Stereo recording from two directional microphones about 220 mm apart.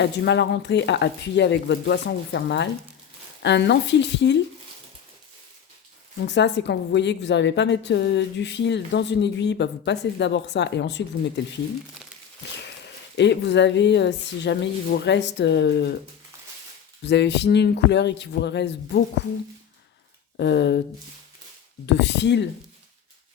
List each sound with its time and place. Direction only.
0.0 s a woman's voice: 50° left (ahead or behind)
6.2 s a woman's voice: 50° left (ahead or behind)
13.1 s a woman's voice: 50° left (ahead or behind)
17.1 s a woman's voice: 50° left (ahead or behind)
20.3 s a woman's voice: 50° left (ahead or behind)
21.8 s a woman's voice: 50° left (ahead or behind)